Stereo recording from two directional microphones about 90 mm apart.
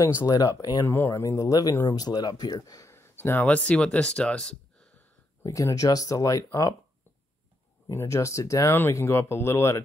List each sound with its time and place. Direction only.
0.2 s speech: 45° left (ahead or behind)
0.8 s speech: 25° left (ahead or behind); by 2.9 s 40° left (ahead or behind)
2.9 s speech: 25° left (ahead or behind); by 4.6 s 10° left (ahead or behind)
5.4 s speech: 35° left (ahead or behind)
7.9 s speech: 30° left (ahead or behind)
8.7 s speech: 25° left (ahead or behind)